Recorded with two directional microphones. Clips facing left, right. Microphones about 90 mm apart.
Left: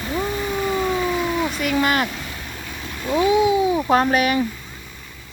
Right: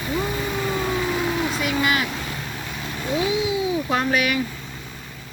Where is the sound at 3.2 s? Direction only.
45° left (ahead or behind).